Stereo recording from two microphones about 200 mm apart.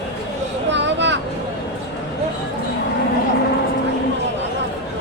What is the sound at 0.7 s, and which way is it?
Vehicle, 60° right (ahead or behind).